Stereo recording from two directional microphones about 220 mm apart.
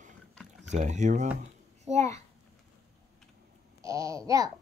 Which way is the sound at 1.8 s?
30° right (ahead or behind).